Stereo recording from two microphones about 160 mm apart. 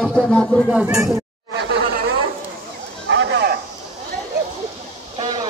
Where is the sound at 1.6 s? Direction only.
90° right.